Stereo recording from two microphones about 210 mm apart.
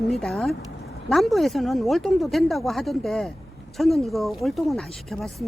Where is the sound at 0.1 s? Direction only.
Centre (ahead or behind).